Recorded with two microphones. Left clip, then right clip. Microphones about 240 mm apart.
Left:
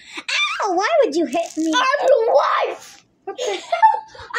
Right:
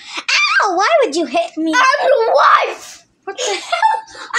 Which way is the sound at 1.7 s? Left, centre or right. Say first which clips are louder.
Right 3 dB; centre.